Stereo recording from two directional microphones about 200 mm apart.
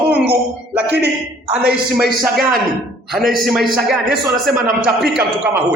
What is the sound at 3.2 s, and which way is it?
A man's voice, centre (ahead or behind).